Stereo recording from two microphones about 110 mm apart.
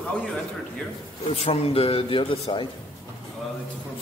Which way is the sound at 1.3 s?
65° left (ahead or behind).